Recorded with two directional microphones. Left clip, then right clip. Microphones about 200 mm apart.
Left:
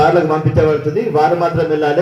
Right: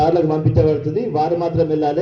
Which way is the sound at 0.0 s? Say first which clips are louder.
Left 4 dB; 25° right (ahead or behind).